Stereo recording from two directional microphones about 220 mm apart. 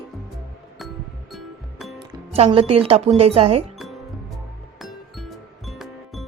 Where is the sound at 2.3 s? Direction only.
25° right (ahead or behind).